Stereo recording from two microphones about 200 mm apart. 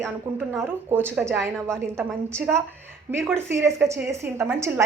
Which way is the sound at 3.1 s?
10° right (ahead or behind).